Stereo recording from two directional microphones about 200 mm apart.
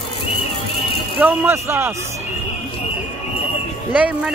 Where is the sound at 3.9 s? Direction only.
5° right (ahead or behind).